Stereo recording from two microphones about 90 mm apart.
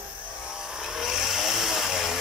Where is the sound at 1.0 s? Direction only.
5° right (ahead or behind).